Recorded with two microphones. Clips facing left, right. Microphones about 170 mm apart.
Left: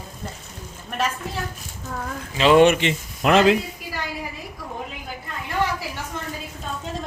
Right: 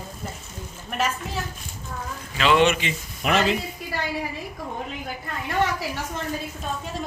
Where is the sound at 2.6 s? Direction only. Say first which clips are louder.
Left 5 dB; 55° left (ahead or behind).